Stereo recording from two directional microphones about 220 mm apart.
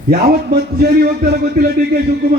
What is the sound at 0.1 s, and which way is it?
A man's voice, 45° right (ahead or behind).